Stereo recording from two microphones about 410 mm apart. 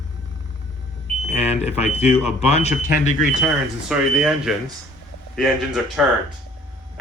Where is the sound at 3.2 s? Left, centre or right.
Centre.